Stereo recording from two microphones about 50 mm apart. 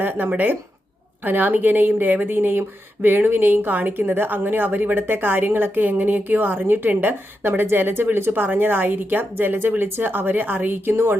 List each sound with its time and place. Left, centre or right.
0.0 s a sound: right
1.2 s speech: right
7.4 s speech: right